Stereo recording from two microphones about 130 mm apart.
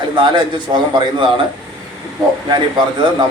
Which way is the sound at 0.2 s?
35° right (ahead or behind).